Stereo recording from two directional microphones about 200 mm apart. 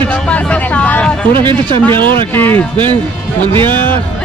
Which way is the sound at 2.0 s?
10° left (ahead or behind).